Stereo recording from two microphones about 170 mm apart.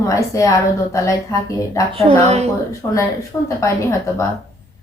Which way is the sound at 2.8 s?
15° left (ahead or behind).